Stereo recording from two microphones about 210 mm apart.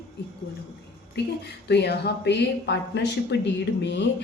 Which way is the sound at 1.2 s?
55° left (ahead or behind).